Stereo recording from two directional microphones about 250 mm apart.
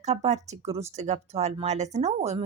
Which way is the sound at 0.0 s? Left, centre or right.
Right.